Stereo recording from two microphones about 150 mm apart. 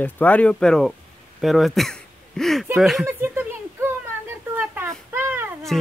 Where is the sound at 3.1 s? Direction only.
15° right (ahead or behind).